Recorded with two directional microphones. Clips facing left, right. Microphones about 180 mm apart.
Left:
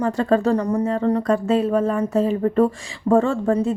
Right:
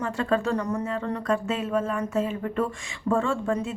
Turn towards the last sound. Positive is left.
turn(degrees=35)  # may be behind; listen again after turning